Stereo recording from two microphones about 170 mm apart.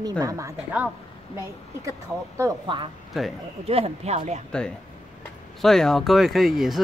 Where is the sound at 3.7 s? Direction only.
35° right (ahead or behind).